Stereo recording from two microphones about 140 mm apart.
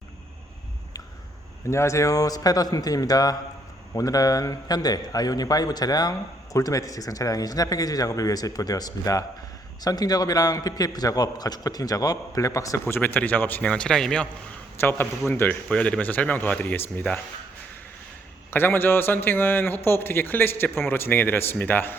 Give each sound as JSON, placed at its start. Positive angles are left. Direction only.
{"t": 1.7, "sound": "a man's voice", "side_deg": 20}
{"t": 14.8, "sound": "a man's voice", "side_deg": 15}
{"t": 18.5, "sound": "a man's voice", "side_deg": 15}